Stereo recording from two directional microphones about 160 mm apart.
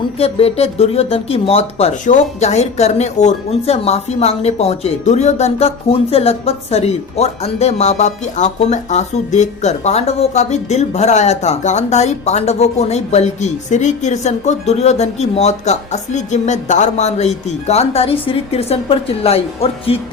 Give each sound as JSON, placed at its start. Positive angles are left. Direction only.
{"t": 0.2, "sound": "speech", "side_deg": 40}